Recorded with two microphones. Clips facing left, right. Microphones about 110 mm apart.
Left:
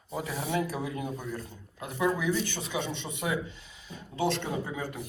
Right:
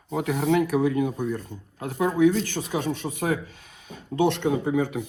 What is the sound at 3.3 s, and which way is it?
Speech, 65° right (ahead or behind).